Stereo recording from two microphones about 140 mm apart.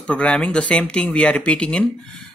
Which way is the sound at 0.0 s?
10° left (ahead or behind).